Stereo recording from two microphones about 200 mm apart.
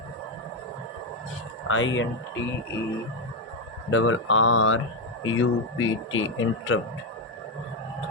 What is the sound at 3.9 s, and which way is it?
Speech, 75° left (ahead or behind).